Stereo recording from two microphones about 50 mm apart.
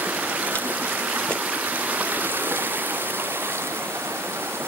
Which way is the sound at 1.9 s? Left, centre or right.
Right.